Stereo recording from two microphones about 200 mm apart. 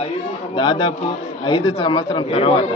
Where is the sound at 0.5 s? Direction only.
25° left (ahead or behind).